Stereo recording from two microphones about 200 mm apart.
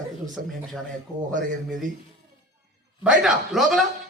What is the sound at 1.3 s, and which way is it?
Speech, 40° right (ahead or behind).